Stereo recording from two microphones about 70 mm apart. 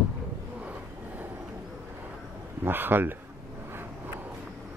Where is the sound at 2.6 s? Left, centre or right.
Right.